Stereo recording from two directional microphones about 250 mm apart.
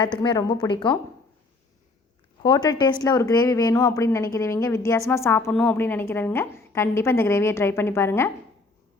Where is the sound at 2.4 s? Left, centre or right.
Centre.